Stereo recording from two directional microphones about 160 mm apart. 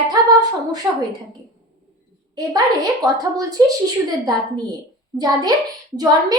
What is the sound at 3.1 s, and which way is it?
A child's voice, 25° right (ahead or behind).